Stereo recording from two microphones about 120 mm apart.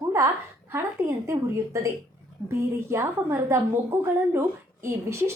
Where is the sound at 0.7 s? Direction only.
25° right (ahead or behind).